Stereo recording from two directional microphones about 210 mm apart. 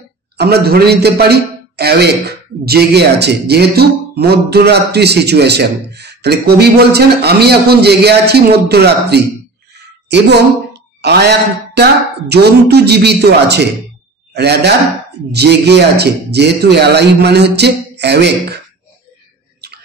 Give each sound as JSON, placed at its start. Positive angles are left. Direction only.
{"t": 0.4, "sound": "a man's voice", "side_deg": -50}
{"t": 9.8, "sound": "a sound", "side_deg": -55}
{"t": 11.0, "sound": "a man's voice", "side_deg": -50}
{"t": 19.6, "sound": "chewing", "side_deg": -50}